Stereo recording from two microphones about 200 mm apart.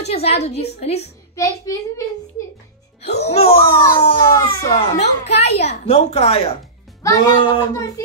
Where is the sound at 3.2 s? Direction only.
30° left (ahead or behind).